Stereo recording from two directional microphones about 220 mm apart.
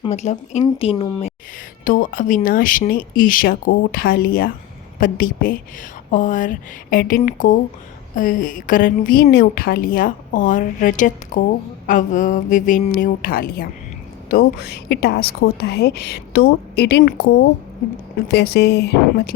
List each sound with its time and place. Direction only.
0.0 s a woman's voice: 30° left (ahead or behind)
1.8 s a woman's voice: 40° left (ahead or behind)